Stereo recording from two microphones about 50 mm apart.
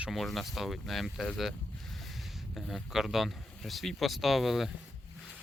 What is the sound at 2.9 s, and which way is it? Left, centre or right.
Speech, centre.